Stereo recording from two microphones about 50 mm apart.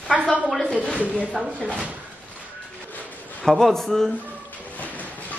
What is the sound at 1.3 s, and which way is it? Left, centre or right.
Speech, right.